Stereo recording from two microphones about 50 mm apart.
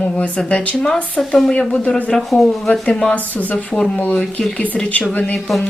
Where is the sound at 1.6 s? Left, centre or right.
Centre.